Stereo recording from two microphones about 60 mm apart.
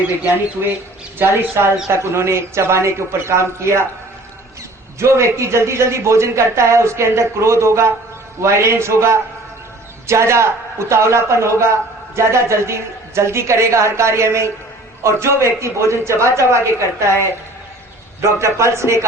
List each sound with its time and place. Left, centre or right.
1.2 s a man's voice: right
4.9 s a man's voice: right
18.3 s a man's voice: right